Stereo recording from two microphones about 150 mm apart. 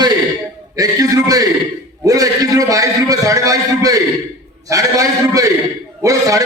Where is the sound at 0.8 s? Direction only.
25° right (ahead or behind).